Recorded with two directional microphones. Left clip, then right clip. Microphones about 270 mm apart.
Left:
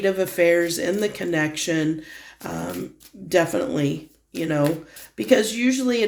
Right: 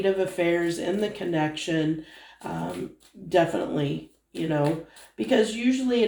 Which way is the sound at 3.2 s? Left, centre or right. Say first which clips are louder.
Left 2 dB; left.